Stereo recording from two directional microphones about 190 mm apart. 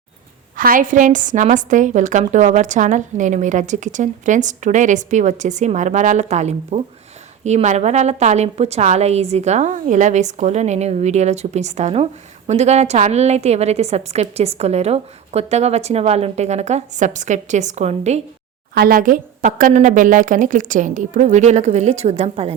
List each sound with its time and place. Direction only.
0.5 s a woman's voice: 45° right (ahead or behind)
18.7 s a woman's voice: 55° right (ahead or behind); by 22.5 s 30° right (ahead or behind)